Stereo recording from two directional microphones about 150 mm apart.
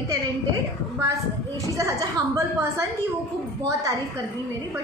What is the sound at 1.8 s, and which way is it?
A woman's voice, 20° right (ahead or behind).